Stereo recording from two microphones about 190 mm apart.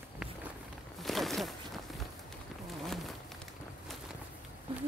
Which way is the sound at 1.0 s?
Centre (ahead or behind).